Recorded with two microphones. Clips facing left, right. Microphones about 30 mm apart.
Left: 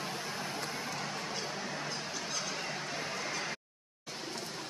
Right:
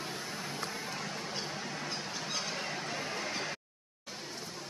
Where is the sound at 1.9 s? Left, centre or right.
Centre.